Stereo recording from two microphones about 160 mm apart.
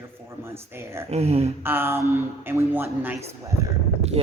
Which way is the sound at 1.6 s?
15° right (ahead or behind).